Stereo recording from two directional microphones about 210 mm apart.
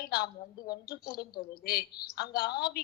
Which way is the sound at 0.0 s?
50° left (ahead or behind).